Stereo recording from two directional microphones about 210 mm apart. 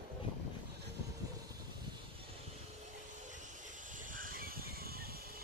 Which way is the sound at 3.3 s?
40° right (ahead or behind).